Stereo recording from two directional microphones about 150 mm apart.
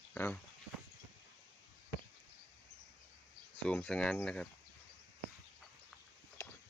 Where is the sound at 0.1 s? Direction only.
10° left (ahead or behind).